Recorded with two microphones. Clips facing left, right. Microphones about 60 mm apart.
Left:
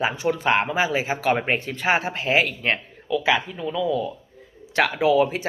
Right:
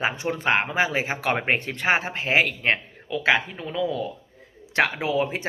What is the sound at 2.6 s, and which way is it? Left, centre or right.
Speech, right.